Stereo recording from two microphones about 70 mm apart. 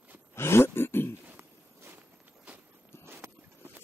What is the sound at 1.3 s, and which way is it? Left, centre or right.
Walk, right.